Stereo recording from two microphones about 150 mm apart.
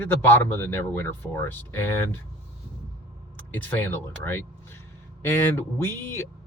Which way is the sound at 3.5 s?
10° left (ahead or behind).